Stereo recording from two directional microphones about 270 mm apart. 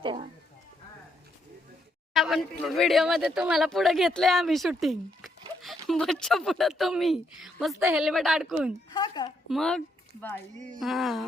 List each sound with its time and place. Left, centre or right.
0.0 s speech: centre
2.1 s speech: centre
8.9 s a woman's voice: centre
9.5 s speech: centre